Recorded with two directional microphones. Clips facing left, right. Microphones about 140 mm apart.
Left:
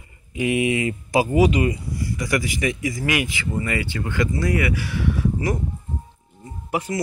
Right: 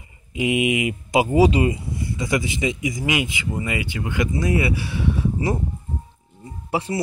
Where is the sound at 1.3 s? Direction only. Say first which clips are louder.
Right 2 dB; 30° right (ahead or behind).